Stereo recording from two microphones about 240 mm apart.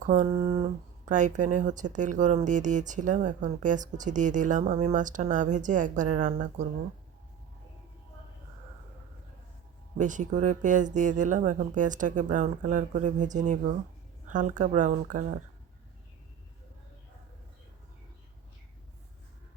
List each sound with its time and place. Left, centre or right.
0.0 s speech: right
10.0 s speech: right